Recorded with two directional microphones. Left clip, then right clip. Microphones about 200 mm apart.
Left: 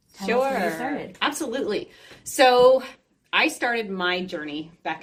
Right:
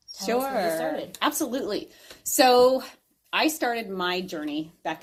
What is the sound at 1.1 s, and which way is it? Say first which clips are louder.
Speech: left 1 dB; 50° right (ahead or behind).